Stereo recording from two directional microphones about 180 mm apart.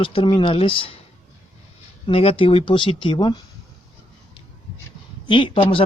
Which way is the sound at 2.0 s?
30° left (ahead or behind).